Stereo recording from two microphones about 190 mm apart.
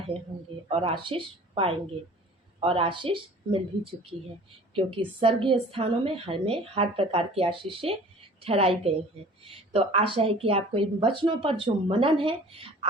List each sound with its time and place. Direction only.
0.7 s speech: 30° right (ahead or behind)
4.7 s a woman's voice: 25° right (ahead or behind)